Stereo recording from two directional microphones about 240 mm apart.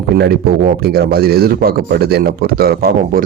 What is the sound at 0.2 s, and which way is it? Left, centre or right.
Speech, right.